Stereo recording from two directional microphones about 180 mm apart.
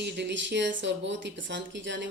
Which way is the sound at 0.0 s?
75° right (ahead or behind).